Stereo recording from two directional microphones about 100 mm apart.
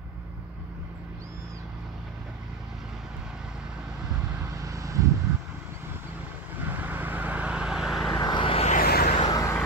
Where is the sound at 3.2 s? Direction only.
5° right (ahead or behind).